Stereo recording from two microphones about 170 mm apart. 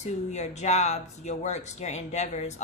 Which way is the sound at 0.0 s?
45° left (ahead or behind).